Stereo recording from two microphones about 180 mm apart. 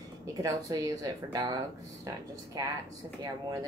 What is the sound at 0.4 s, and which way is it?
Speech, 20° right (ahead or behind).